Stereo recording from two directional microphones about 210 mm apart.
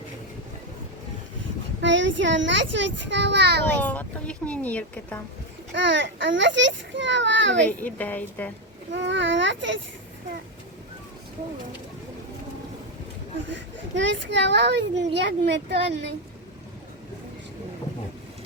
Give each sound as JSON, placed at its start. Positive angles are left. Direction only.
{"t": 1.8, "sound": "a child's voice", "side_deg": -60}
{"t": 3.8, "sound": "a woman's voice", "side_deg": 5}
{"t": 5.9, "sound": "a child's voice", "side_deg": -60}
{"t": 7.9, "sound": "a woman's voice", "side_deg": 10}
{"t": 8.9, "sound": "a child's voice", "side_deg": -60}
{"t": 13.5, "sound": "a child's voice", "side_deg": -60}